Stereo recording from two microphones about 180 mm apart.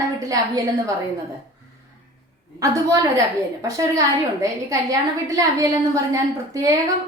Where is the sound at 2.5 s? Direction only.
20° right (ahead or behind).